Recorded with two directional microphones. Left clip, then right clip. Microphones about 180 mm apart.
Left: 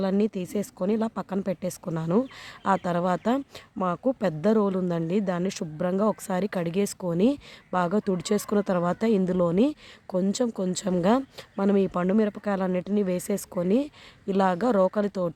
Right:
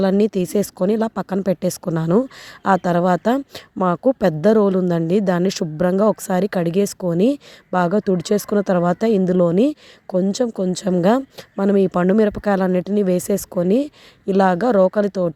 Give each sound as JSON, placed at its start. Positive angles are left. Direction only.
{"t": 0.0, "sound": "a woman's voice", "side_deg": -35}